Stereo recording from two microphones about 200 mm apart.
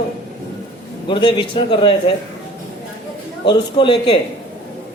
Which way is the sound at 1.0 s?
25° left (ahead or behind).